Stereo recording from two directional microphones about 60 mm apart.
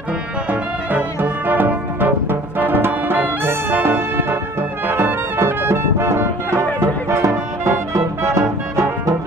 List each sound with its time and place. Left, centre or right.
0.5 s music: right